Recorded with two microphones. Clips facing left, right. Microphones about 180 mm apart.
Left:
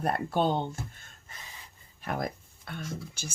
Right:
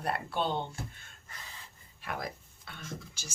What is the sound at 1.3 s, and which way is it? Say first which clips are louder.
Gasp: even; 15° left (ahead or behind).